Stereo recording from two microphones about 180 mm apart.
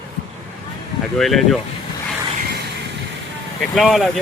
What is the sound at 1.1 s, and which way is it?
Speech, centre (ahead or behind).